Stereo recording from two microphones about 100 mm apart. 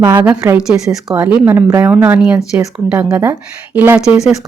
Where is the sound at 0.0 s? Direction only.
20° right (ahead or behind).